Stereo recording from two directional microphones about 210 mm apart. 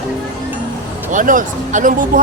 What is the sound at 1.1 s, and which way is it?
Speech, 40° right (ahead or behind).